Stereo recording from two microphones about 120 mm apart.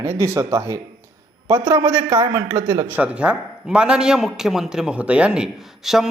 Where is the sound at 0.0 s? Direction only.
25° right (ahead or behind).